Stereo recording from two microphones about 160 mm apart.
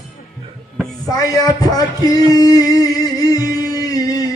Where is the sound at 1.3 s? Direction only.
25° left (ahead or behind).